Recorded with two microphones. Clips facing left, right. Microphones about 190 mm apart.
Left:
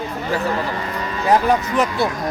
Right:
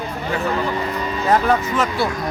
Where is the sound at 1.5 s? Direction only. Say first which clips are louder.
Left 1 dB; 15° left (ahead or behind).